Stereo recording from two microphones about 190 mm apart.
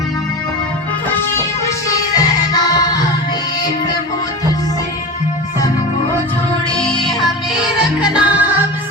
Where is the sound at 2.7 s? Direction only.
20° left (ahead or behind).